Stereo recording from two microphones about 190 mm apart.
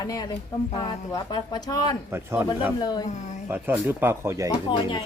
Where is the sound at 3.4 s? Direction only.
10° right (ahead or behind).